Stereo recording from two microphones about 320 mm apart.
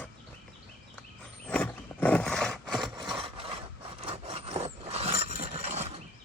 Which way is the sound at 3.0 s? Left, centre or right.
Centre.